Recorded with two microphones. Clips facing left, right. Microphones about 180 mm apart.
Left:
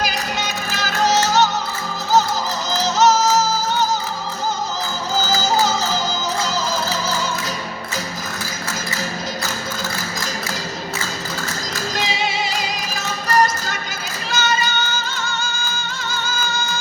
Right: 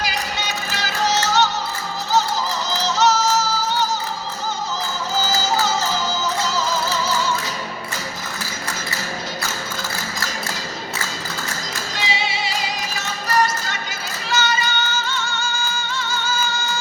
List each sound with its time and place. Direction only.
0.8 s music: 45° left (ahead or behind)
2.8 s music: 45° left (ahead or behind)
11.9 s music: 45° left (ahead or behind)